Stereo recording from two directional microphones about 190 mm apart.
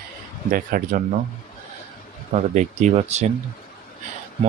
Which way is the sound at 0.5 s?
50° right (ahead or behind).